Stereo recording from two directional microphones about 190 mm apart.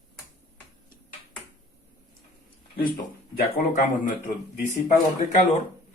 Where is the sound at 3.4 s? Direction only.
45° left (ahead or behind).